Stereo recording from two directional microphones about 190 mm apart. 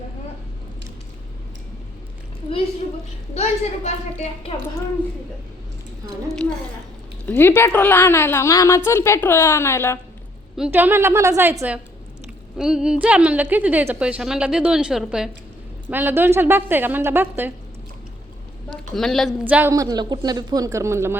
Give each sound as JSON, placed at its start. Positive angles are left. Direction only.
{"t": 3.3, "sound": "a woman's voice", "side_deg": 35}
{"t": 7.3, "sound": "a woman's voice", "side_deg": 10}
{"t": 10.6, "sound": "a woman's voice", "side_deg": -10}
{"t": 18.9, "sound": "speech", "side_deg": 0}